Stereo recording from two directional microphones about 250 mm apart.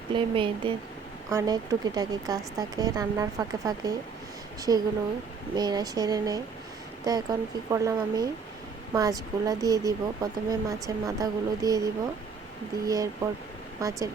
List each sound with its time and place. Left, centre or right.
0.1 s a woman's voice: centre